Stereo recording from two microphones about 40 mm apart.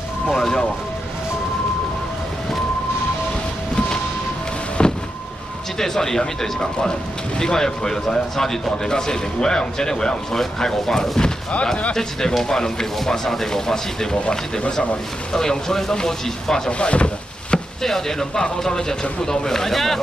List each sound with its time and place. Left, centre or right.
0.3 s speech: centre
4.8 s vehicle: left
5.8 s speech: centre
15.3 s speech: centre
16.7 s wood: left
17.8 s speech: centre